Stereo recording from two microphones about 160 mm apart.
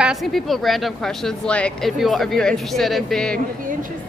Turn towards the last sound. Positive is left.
turn(degrees=5)  # may be behind; listen again after turning